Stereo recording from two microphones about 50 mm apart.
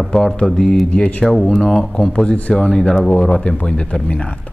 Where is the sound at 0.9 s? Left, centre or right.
Centre.